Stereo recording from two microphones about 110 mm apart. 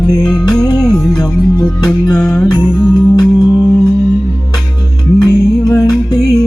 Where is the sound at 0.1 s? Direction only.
40° left (ahead or behind).